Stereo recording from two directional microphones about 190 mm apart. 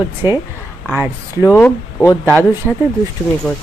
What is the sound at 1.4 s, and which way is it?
Speech, 10° left (ahead or behind).